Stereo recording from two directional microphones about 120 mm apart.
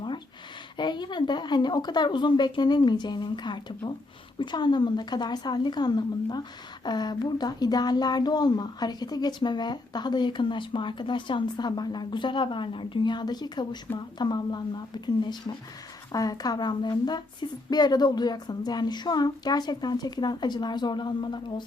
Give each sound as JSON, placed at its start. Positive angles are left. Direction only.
{"t": 0.8, "sound": "speech", "side_deg": 40}